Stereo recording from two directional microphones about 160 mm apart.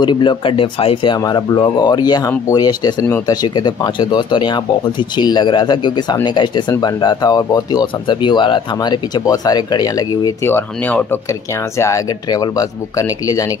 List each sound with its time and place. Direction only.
0.0 s speech: 30° left (ahead or behind); by 11.1 s 10° left (ahead or behind)
11.8 s speech: 20° left (ahead or behind)